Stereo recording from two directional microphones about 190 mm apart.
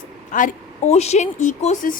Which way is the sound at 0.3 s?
40° left (ahead or behind).